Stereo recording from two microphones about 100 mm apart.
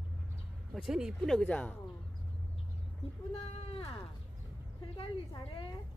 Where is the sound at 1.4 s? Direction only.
15° left (ahead or behind).